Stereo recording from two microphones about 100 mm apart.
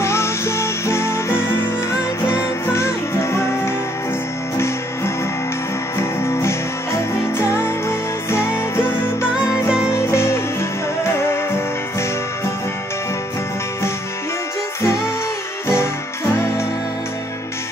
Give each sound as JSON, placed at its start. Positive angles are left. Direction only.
{"t": 0.0, "sound": "music", "side_deg": 25}
{"t": 7.3, "sound": "music", "side_deg": 25}